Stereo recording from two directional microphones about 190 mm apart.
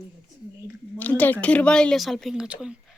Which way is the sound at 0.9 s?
10° left (ahead or behind).